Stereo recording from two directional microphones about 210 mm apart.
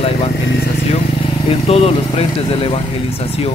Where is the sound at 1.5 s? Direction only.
30° left (ahead or behind).